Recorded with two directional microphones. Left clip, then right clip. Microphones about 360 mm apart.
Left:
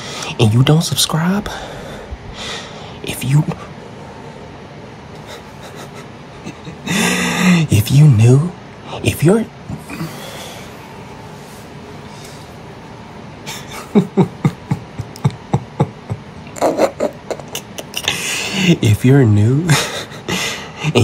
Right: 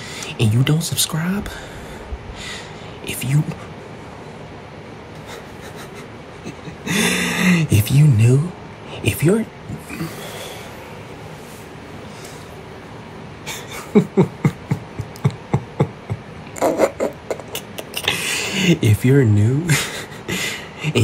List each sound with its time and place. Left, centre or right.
0.0 s speech: centre
2.3 s snort: centre
3.1 s speech: centre
6.4 s a sound: centre
8.9 s speech: centre
13.5 s a sound: centre